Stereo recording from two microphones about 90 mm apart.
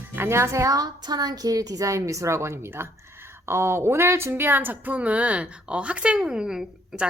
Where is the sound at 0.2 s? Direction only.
30° right (ahead or behind).